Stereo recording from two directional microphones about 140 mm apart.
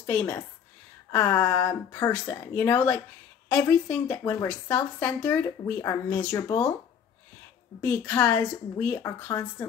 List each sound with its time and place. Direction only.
0.0 s speech: 20° left (ahead or behind)
7.8 s a woman's voice: 15° left (ahead or behind)